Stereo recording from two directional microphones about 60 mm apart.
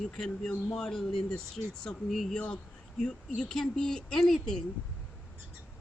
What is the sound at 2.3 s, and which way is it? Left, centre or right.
Speech, centre.